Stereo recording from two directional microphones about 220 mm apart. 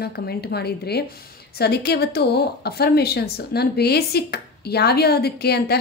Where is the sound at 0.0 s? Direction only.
45° left (ahead or behind).